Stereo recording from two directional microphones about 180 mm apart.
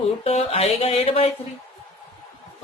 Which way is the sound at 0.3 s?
35° left (ahead or behind).